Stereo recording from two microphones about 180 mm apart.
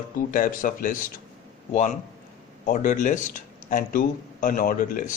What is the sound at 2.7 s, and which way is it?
Speech, 45° left (ahead or behind).